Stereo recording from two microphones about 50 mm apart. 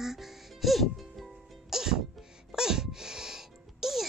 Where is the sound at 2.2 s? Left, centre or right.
Centre.